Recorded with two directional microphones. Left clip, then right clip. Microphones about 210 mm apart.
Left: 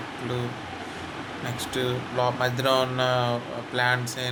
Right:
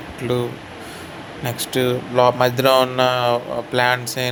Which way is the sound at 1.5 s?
30° right (ahead or behind).